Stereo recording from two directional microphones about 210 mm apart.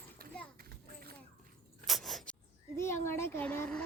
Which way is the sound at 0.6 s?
45° right (ahead or behind).